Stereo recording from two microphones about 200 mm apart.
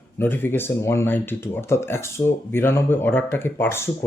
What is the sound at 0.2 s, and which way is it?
Speech, 10° left (ahead or behind).